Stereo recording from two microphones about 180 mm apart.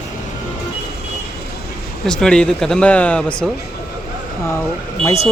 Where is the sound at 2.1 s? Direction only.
5° left (ahead or behind).